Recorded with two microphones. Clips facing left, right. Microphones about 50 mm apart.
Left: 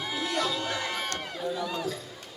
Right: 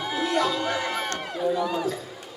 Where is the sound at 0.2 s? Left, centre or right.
Centre.